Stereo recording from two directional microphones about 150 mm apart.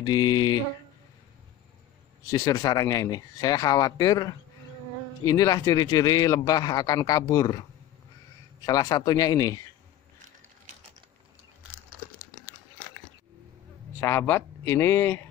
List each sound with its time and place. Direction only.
0.0 s a man's voice: 30° left (ahead or behind)
2.2 s a man's voice: 25° left (ahead or behind)
8.6 s a man's voice: 25° left (ahead or behind)
13.9 s speech: 15° left (ahead or behind)